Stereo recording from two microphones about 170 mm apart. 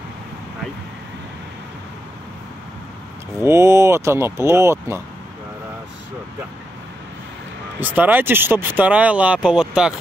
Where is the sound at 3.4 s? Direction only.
15° right (ahead or behind).